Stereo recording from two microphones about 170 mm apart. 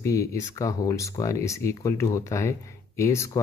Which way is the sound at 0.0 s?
20° left (ahead or behind).